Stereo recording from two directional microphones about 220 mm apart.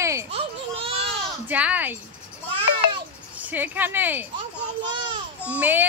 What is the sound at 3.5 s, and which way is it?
Speech, 10° right (ahead or behind).